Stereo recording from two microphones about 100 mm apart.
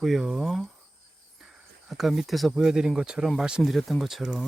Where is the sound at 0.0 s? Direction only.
5° right (ahead or behind).